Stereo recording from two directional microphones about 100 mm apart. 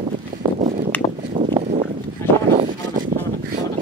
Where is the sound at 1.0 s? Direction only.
70° left (ahead or behind).